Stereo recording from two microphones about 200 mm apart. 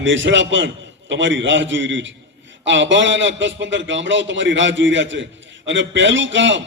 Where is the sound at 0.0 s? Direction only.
65° right (ahead or behind).